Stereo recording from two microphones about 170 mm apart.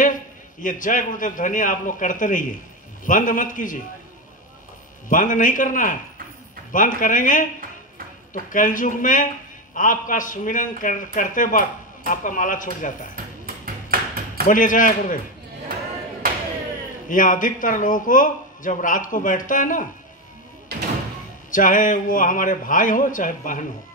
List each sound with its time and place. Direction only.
0.0 s a man's voice: 50° left (ahead or behind)
5.1 s a man's voice: 50° left (ahead or behind)
14.5 s a man's voice: 50° left (ahead or behind)
17.1 s a man's voice: 50° left (ahead or behind)
20.7 s music: 70° right (ahead or behind)
21.5 s a man's voice: 50° left (ahead or behind)